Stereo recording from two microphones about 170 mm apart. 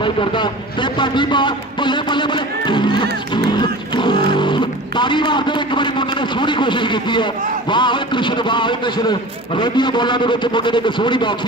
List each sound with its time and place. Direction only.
0.0 s a man's voice: 30° left (ahead or behind)